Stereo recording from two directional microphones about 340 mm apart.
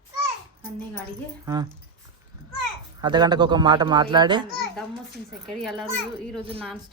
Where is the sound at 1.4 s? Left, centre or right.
Centre.